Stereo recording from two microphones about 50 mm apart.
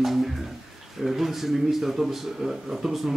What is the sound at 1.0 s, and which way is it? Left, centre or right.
Speech, centre.